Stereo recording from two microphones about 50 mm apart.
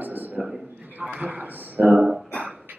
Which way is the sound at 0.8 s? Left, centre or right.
Right.